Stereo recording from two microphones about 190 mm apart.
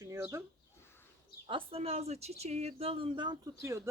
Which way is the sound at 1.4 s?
30° right (ahead or behind).